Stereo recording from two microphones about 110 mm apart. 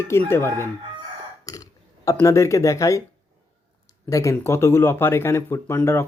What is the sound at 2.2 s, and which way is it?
Speech, 25° left (ahead or behind).